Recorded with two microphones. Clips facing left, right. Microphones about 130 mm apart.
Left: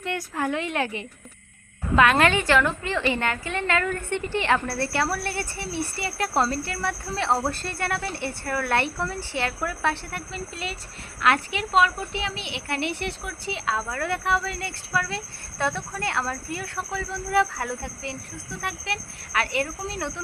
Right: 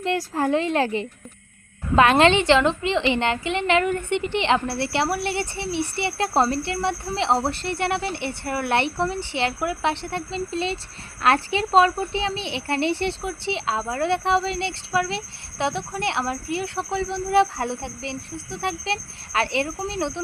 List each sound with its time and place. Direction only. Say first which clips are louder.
0.0 s a woman's voice: right 5 dB; 30° right (ahead or behind)